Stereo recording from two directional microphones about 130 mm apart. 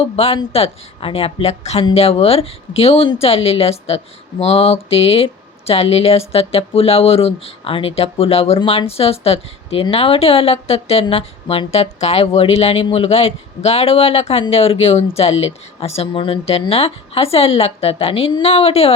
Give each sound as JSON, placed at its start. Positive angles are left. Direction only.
{"t": 0.0, "sound": "speech", "side_deg": 50}
{"t": 8.5, "sound": "speech", "side_deg": 40}
{"t": 18.4, "sound": "speech", "side_deg": 50}